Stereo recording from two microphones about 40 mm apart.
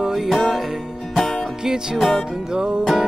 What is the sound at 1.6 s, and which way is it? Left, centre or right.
Music, centre.